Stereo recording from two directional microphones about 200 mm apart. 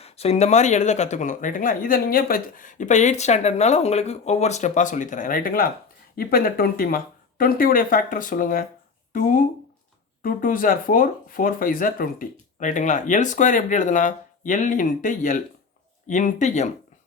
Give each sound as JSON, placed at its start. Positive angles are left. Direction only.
{"t": 0.0, "sound": "speech", "side_deg": 30}